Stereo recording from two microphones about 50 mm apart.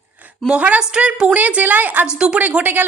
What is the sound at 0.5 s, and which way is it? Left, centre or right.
Speech, right.